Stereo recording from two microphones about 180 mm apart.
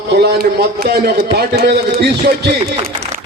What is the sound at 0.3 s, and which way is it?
A man's voice, 60° right (ahead or behind).